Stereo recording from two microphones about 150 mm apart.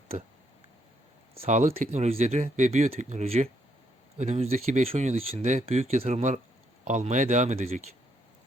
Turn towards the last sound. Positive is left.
turn(degrees=-50)  # may be behind; listen again after turning